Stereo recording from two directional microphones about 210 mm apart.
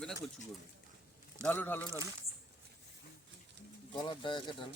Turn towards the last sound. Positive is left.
turn(degrees=20)  # may be behind; listen again after turning